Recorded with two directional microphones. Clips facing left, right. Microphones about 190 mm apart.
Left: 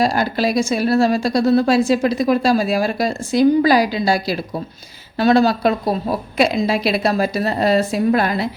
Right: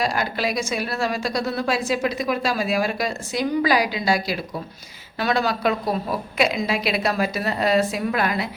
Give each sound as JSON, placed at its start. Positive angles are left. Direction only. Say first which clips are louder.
{"t": 0.0, "sound": "a woman's voice", "louder": "left 6 dB", "side_deg": 35}